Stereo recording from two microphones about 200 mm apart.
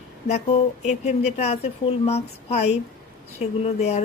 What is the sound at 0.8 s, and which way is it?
A woman's voice, 35° left (ahead or behind).